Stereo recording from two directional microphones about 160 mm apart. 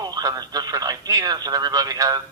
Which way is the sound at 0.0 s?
25° right (ahead or behind).